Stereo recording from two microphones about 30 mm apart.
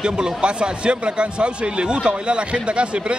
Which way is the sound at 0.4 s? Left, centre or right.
Right.